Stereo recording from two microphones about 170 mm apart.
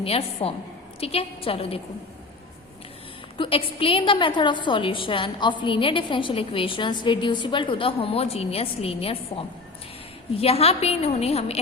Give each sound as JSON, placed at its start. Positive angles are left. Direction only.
{"t": 0.0, "sound": "a woman's voice", "side_deg": 35}
{"t": 3.3, "sound": "a woman's voice", "side_deg": 30}